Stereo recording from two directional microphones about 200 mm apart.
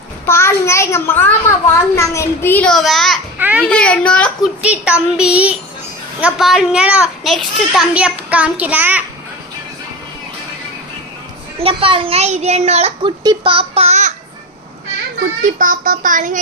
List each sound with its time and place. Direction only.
0.3 s a child's voice: 15° left (ahead or behind); by 3.6 s 10° right (ahead or behind)
3.6 s a woman's voice: 5° left (ahead or behind)
4.6 s a woman's voice: 5° right (ahead or behind)
11.6 s a child's voice: 25° right (ahead or behind)
15.4 s a child's voice: 40° right (ahead or behind)